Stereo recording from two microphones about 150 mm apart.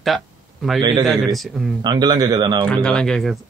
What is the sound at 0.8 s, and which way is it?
Speech, 30° right (ahead or behind).